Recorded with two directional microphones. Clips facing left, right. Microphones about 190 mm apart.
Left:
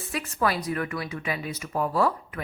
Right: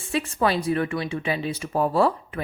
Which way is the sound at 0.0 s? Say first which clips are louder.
Right 4 dB; 25° right (ahead or behind).